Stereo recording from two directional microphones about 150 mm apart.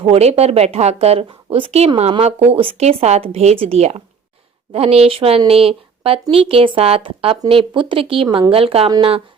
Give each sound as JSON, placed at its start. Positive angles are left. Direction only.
{"t": 0.0, "sound": "a woman's voice", "side_deg": -40}